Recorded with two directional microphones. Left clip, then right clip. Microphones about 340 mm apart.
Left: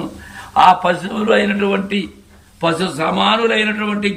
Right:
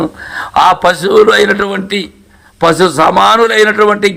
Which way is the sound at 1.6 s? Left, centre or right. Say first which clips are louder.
Right 3 dB; centre.